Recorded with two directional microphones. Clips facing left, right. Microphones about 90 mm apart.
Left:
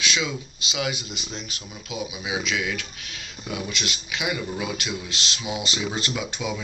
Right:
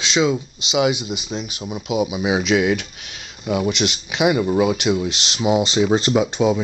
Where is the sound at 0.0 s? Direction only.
30° right (ahead or behind).